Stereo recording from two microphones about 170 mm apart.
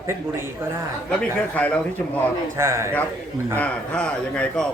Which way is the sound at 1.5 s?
10° left (ahead or behind).